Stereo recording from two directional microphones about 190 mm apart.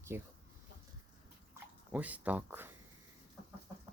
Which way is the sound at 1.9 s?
10° right (ahead or behind).